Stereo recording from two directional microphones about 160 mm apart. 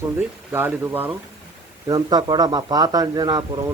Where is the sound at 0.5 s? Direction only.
15° right (ahead or behind).